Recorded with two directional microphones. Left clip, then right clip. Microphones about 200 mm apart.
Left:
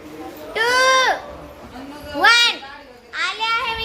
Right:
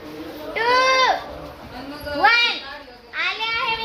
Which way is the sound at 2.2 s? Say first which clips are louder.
Left 3 dB; 30° left (ahead or behind).